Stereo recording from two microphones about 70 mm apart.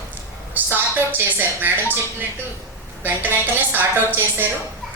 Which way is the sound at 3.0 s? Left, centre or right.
Right.